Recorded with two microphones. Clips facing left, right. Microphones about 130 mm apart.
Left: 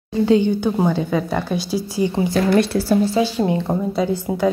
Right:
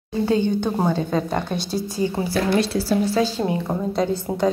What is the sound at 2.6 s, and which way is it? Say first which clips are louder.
Speech: left 3 dB; 55° left (ahead or behind).